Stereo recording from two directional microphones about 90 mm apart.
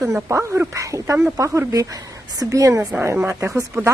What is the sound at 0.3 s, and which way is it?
Speech, 30° right (ahead or behind).